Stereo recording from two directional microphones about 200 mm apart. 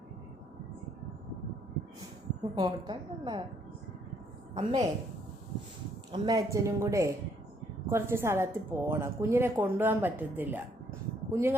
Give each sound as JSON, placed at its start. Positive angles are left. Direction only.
{"t": 2.6, "sound": "a woman's voice", "side_deg": -20}
{"t": 4.5, "sound": "a woman's voice", "side_deg": -20}
{"t": 6.1, "sound": "a woman's voice", "side_deg": -20}